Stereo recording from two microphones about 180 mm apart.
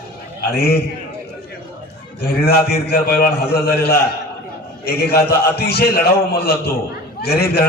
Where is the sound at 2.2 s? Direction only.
60° left (ahead or behind).